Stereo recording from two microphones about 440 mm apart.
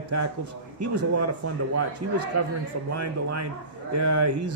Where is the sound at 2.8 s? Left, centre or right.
Right.